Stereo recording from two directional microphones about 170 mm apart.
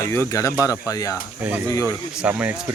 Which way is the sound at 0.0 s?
15° left (ahead or behind).